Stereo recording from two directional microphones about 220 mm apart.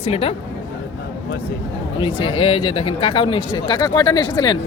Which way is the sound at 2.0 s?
25° left (ahead or behind).